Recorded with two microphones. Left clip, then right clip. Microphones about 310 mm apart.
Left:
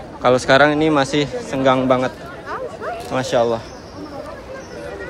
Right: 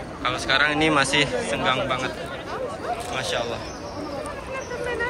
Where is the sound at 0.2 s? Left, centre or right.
Centre.